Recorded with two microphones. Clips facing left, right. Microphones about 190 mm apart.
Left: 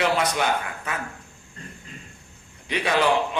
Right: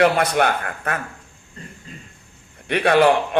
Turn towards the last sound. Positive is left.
turn(degrees=-60)  # may be behind; listen again after turning